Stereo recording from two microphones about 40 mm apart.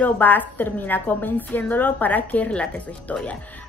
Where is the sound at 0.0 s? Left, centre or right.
Left.